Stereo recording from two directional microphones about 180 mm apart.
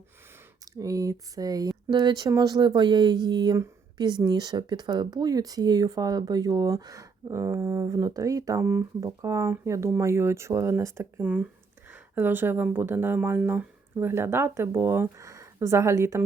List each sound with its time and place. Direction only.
0.8 s speech: 20° right (ahead or behind)